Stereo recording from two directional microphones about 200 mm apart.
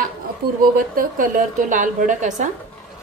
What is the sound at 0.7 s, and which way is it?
A woman's voice, 45° right (ahead or behind).